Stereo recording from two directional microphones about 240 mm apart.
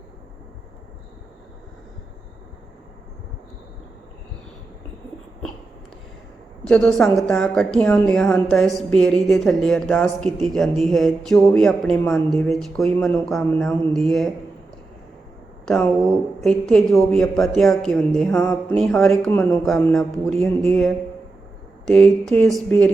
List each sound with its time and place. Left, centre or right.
6.7 s speech: centre
15.6 s speech: centre
21.8 s speech: centre